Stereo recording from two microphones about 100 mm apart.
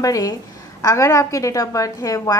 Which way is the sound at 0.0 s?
35° left (ahead or behind).